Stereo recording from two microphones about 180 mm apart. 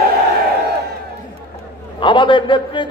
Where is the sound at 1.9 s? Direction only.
25° left (ahead or behind).